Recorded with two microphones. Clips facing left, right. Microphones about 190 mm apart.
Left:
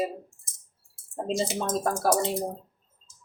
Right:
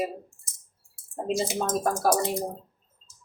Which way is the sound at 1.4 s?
25° left (ahead or behind).